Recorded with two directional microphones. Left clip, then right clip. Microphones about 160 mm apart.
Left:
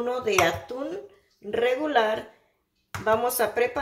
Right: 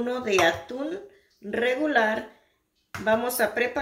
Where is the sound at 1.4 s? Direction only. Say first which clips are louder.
Even; 15° right (ahead or behind).